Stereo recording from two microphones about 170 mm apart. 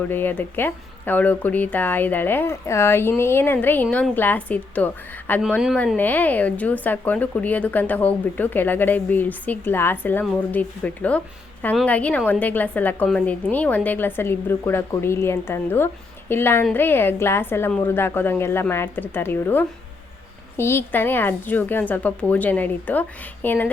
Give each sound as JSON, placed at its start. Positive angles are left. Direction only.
{"t": 0.1, "sound": "speech", "side_deg": 10}